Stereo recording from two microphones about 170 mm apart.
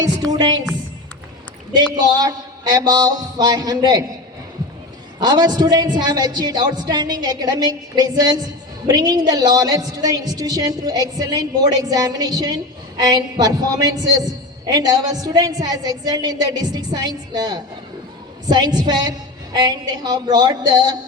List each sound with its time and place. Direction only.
0.3 s a man's voice: 25° right (ahead or behind)
2.0 s a man's voice: 25° right (ahead or behind)
5.2 s a man's voice: 25° right (ahead or behind)